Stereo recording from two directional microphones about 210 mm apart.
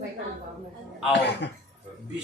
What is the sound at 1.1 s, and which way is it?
Speech, 55° left (ahead or behind).